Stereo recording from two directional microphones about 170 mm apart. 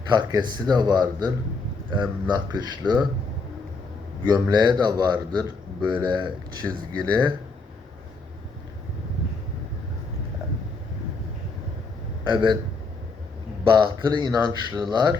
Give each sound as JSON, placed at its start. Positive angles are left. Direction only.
{"t": 0.1, "sound": "speech", "side_deg": -25}
{"t": 4.3, "sound": "speech", "side_deg": -25}
{"t": 12.2, "sound": "speech", "side_deg": -25}
{"t": 13.7, "sound": "speech", "side_deg": -30}